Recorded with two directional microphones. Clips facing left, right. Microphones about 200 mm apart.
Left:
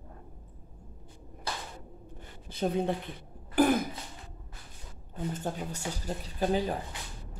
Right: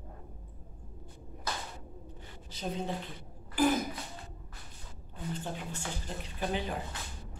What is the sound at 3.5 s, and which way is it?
Cough, 55° left (ahead or behind).